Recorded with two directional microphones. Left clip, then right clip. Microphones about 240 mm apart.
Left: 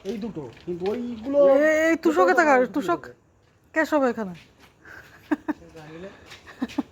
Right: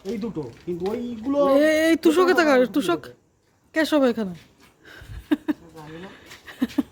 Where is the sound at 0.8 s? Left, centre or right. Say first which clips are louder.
Right 1 dB; right.